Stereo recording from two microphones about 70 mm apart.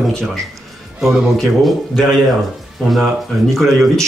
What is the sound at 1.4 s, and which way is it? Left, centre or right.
Speech, centre.